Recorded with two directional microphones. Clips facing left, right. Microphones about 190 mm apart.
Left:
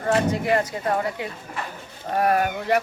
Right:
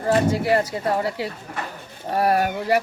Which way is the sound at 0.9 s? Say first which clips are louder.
Right 2 dB; 35° right (ahead or behind).